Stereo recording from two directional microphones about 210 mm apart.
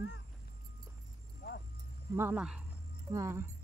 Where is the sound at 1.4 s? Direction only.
50° left (ahead or behind).